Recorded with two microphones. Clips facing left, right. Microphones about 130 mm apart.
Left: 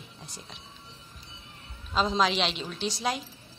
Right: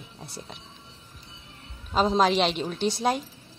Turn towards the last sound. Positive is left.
turn(degrees=-55)  # may be behind; listen again after turning